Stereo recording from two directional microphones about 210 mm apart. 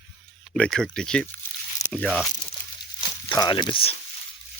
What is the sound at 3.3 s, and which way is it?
Speech, 20° left (ahead or behind).